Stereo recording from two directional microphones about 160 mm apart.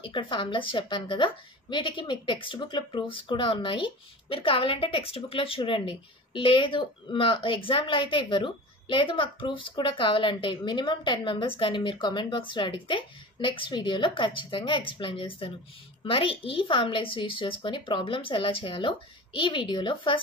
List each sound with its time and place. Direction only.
0.0 s a woman's voice: 30° left (ahead or behind)